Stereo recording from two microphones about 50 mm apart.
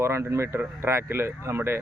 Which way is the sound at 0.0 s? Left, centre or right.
Right.